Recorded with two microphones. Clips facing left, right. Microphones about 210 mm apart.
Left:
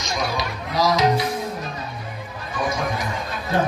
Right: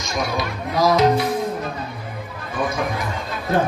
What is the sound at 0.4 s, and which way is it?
Music, 55° right (ahead or behind).